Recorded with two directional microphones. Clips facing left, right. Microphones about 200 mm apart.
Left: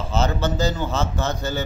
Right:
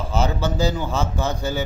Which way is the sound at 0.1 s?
10° right (ahead or behind).